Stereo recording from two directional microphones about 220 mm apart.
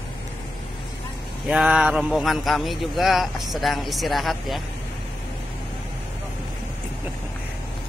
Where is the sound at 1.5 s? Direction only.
5° right (ahead or behind).